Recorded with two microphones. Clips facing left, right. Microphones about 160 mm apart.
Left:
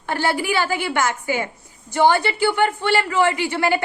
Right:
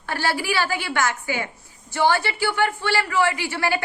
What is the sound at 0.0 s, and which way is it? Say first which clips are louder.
Speech: left 3 dB; 20° left (ahead or behind).